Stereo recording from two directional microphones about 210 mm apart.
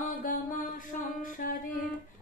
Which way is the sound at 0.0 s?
40° left (ahead or behind).